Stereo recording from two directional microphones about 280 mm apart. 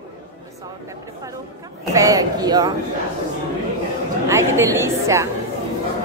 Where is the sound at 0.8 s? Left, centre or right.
Centre.